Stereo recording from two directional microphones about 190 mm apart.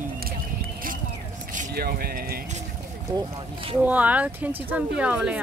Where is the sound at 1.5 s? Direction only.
55° right (ahead or behind).